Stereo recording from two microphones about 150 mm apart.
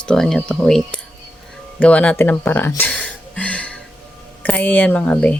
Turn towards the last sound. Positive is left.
turn(degrees=5)  # may be behind; listen again after turning